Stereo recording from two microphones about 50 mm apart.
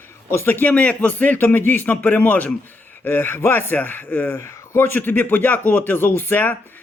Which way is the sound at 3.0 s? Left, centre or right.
Left.